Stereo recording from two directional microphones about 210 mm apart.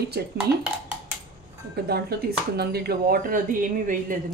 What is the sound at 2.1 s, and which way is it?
Speech, 50° right (ahead or behind).